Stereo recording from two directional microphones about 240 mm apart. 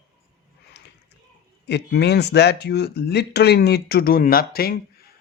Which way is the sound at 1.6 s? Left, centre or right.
Left.